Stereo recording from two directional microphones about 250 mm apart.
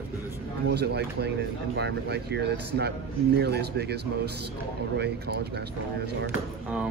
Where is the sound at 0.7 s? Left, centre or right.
Right.